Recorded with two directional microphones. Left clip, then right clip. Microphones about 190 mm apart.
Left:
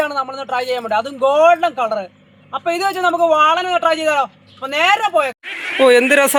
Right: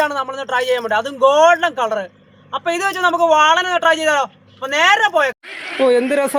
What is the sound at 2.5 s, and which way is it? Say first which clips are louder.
Speech: left 1 dB; 30° right (ahead or behind).